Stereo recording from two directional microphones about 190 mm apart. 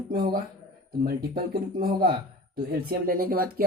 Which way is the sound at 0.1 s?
50° right (ahead or behind).